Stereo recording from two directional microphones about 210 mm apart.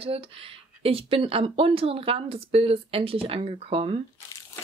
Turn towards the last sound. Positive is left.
turn(degrees=-30)  # may be behind; listen again after turning